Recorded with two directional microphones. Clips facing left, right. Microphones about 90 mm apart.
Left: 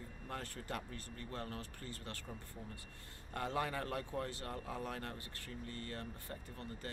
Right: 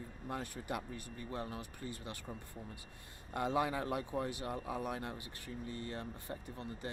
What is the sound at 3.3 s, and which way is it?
Speech, 15° right (ahead or behind).